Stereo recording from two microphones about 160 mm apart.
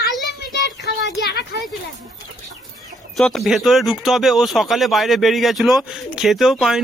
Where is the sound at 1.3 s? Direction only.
80° left.